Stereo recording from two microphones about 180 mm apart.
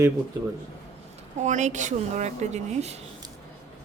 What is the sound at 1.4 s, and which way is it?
A woman's voice, 40° right (ahead or behind).